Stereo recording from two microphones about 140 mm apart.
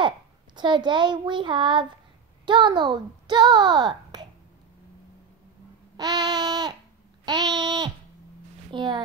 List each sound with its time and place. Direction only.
0.6 s child singing: 35° right (ahead or behind)
2.4 s a child's voice: 35° right (ahead or behind)
5.9 s babbling: 25° right (ahead or behind)
7.2 s a sound: 30° right (ahead or behind)
8.7 s child singing: 35° right (ahead or behind)